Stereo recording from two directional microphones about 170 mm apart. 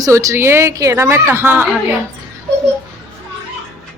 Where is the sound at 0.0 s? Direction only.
20° right (ahead or behind).